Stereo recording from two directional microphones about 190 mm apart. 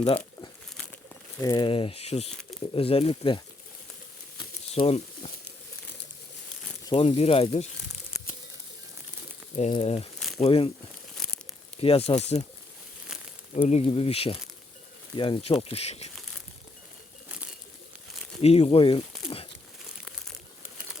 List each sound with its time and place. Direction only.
1.4 s speech: 20° left (ahead or behind)
4.4 s pigeon: 30° left (ahead or behind)
6.8 s speech: 30° left (ahead or behind)
9.6 s speech: 35° left (ahead or behind)
10.2 s crumpling: centre (ahead or behind)
10.4 s speech: 30° left (ahead or behind)
11.2 s crumpling: centre (ahead or behind)
11.8 s speech: 30° left (ahead or behind)
13.6 s speech: 30° left (ahead or behind)
17.2 s pigeon: 5° right (ahead or behind)
18.4 s speech: 30° left (ahead or behind)